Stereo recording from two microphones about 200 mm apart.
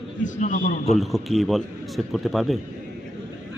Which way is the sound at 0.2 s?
40° left (ahead or behind).